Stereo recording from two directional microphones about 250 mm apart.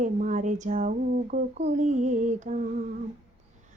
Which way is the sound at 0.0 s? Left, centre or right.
Right.